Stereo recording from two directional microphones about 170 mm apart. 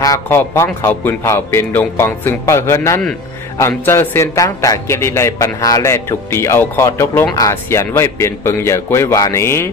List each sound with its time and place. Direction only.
0.0 s a man's voice: 15° left (ahead or behind)